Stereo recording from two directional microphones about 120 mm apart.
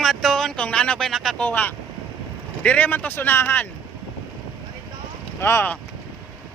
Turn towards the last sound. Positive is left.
turn(degrees=15)  # may be behind; listen again after turning